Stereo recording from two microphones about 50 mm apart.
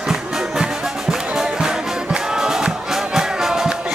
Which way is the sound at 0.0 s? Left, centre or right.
Centre.